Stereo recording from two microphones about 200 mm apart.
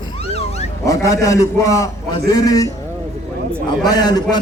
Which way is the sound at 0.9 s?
15° left (ahead or behind).